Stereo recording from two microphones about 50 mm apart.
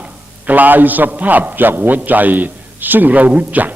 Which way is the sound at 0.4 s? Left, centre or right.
Right.